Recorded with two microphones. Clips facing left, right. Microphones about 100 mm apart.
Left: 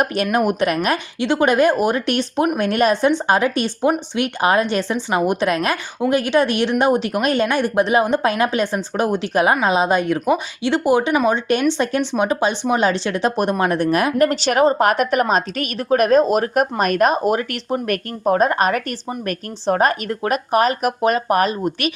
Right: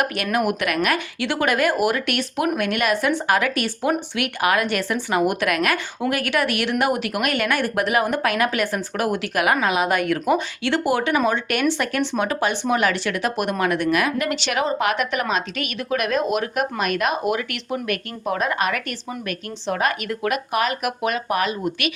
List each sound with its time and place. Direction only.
0.0 s a woman's voice: 30° left (ahead or behind)